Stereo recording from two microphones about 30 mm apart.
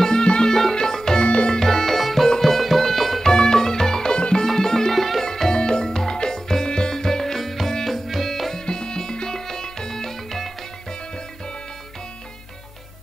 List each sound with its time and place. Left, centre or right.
0.0 s music: left
1.2 s music: left
1.5 s music: centre
3.2 s music: left
4.6 s music: centre
4.9 s music: centre
5.2 s music: centre
8.6 s music: left